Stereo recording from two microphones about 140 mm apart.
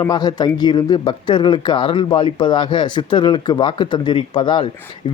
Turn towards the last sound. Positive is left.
turn(degrees=35)  # may be behind; listen again after turning